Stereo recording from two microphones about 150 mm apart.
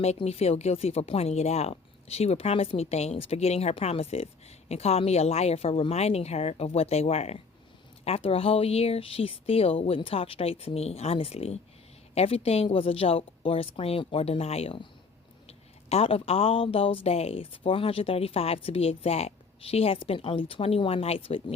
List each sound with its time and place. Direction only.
0.0 s speech: 45° left (ahead or behind)